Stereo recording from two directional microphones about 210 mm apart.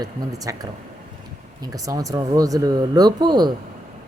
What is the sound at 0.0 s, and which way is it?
Speech, 20° right (ahead or behind).